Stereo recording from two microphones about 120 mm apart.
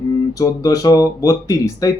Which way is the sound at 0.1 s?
30° left (ahead or behind).